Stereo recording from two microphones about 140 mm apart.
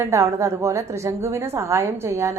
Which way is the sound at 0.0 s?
20° right (ahead or behind).